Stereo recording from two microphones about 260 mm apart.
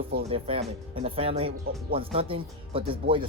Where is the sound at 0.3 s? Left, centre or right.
Right.